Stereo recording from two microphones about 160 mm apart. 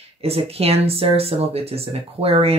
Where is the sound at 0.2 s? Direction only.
40° right (ahead or behind).